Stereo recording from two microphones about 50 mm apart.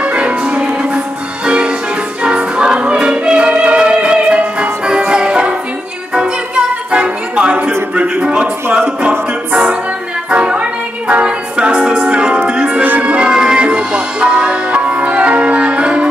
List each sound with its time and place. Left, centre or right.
0.0 s music: right
7.9 s a sound: centre
8.7 s music: right
12.8 s music: right